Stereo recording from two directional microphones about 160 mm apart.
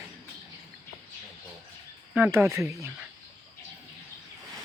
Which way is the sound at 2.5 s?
20° right (ahead or behind).